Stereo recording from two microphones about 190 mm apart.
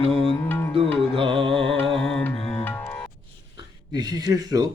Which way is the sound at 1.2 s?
30° right (ahead or behind).